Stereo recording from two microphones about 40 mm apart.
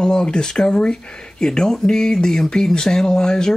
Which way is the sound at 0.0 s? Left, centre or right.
Left.